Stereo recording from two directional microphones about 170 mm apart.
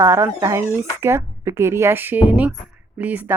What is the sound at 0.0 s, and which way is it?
Speech, 15° right (ahead or behind).